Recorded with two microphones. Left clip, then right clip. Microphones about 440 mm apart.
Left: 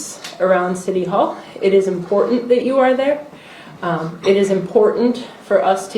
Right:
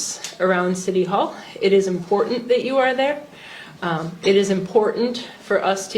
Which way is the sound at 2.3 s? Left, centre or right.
Right.